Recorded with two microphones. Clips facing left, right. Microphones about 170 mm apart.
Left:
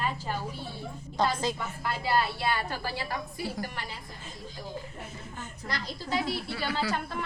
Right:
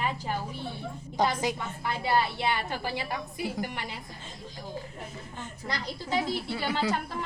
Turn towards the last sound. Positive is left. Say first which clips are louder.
# right 2 dB
turn(degrees=-20)  # may be behind; listen again after turning